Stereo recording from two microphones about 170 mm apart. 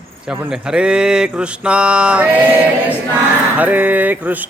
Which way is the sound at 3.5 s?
10° right (ahead or behind).